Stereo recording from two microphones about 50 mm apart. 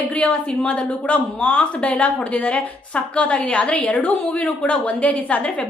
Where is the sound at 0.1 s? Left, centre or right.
Left.